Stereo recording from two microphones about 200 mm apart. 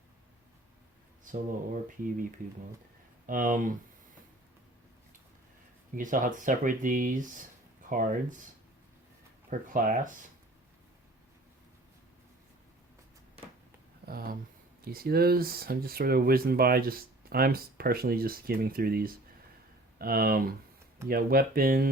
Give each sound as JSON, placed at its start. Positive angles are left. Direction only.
{"t": 1.2, "sound": "speech", "side_deg": -40}
{"t": 3.2, "sound": "speech", "side_deg": -40}
{"t": 6.0, "sound": "speech", "side_deg": -40}
{"t": 9.5, "sound": "speech", "side_deg": -45}
{"t": 14.0, "sound": "a sound", "side_deg": -50}
{"t": 14.8, "sound": "speech", "side_deg": -50}